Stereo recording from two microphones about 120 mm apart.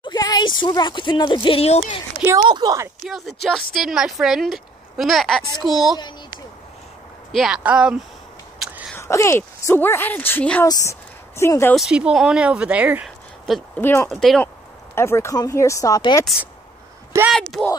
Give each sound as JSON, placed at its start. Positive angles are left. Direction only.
{"t": 0.0, "sound": "speech", "side_deg": 35}
{"t": 2.5, "sound": "a woman's voice", "side_deg": -30}
{"t": 3.1, "sound": "speech", "side_deg": 0}
{"t": 7.3, "sound": "speech", "side_deg": -5}
{"t": 8.6, "sound": "a sound", "side_deg": 0}
{"t": 8.9, "sound": "speech", "side_deg": 20}
{"t": 10.6, "sound": "speech", "side_deg": 25}
{"t": 11.7, "sound": "speech", "side_deg": -5}
{"t": 13.7, "sound": "speech", "side_deg": 15}
{"t": 14.0, "sound": "speech", "side_deg": 0}
{"t": 15.0, "sound": "speech", "side_deg": 20}
{"t": 17.3, "sound": "speech", "side_deg": 0}